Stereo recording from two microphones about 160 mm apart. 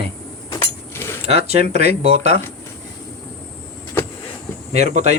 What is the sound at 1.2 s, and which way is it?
A man's voice, 40° right (ahead or behind).